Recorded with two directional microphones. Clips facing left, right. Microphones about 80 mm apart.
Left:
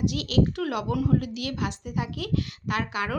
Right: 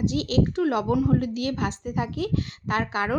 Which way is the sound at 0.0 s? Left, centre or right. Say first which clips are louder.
Right 1 dB; right.